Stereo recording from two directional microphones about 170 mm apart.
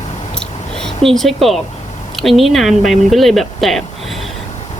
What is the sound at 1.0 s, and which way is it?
Speech, centre (ahead or behind).